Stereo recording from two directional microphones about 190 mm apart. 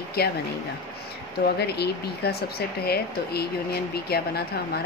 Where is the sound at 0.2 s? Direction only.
55° left (ahead or behind).